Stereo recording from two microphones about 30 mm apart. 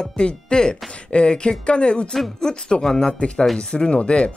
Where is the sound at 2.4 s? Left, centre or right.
Left.